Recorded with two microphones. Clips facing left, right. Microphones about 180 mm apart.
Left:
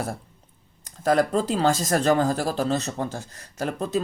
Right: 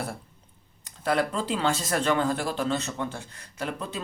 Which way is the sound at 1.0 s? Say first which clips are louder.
Left 5 dB; 40° left (ahead or behind).